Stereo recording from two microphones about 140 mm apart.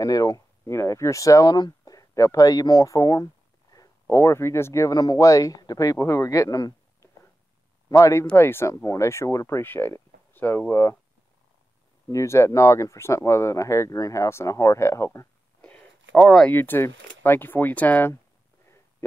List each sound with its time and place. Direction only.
0.0 s speech: 25° left (ahead or behind)
12.1 s speech: 20° left (ahead or behind)
16.2 s speech: 5° left (ahead or behind)